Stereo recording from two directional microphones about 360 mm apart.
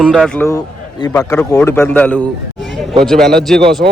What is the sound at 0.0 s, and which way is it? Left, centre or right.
A man's voice, centre.